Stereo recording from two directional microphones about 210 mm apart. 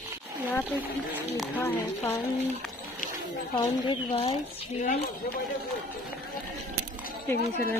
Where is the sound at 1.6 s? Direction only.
10° left (ahead or behind).